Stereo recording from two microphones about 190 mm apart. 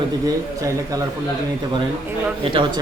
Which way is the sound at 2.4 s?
25° right (ahead or behind).